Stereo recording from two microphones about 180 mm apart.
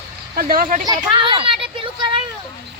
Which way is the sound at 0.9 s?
25° right (ahead or behind).